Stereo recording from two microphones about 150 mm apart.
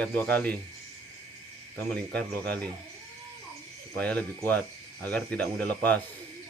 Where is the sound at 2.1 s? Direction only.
10° left (ahead or behind).